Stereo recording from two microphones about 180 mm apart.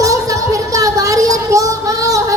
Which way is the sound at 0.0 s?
20° right (ahead or behind).